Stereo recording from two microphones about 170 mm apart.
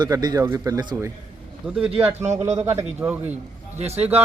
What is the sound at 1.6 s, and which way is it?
Speech, 5° right (ahead or behind).